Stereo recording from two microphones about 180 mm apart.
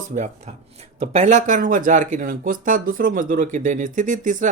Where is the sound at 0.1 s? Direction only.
40° right (ahead or behind).